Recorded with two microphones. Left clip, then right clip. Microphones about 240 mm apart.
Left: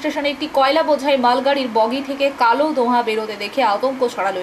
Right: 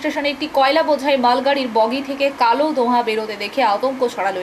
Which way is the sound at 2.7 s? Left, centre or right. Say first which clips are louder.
Even; left.